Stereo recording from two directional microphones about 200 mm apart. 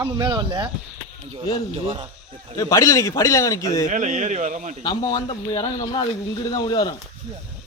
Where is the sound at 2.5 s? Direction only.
15° left (ahead or behind).